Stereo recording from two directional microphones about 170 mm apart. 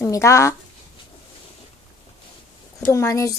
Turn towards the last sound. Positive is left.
turn(degrees=20)  # may be behind; listen again after turning